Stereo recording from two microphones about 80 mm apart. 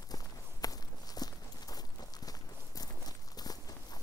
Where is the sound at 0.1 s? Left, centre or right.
Left.